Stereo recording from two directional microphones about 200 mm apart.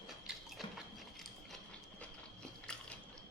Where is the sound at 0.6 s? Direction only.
Centre (ahead or behind).